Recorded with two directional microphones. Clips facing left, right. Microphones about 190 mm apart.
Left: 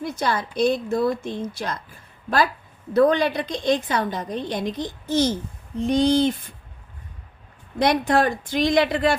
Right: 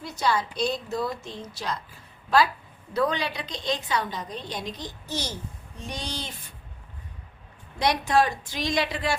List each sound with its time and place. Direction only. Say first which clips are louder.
0.0 s a woman's voice: left 2 dB; 50° left (ahead or behind)
2.9 s a woman's voice: left 9 dB; 50° left (ahead or behind)
7.8 s a woman's voice: left 4 dB; 55° left (ahead or behind)